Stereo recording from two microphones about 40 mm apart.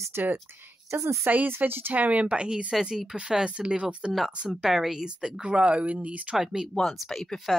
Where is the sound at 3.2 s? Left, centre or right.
Centre.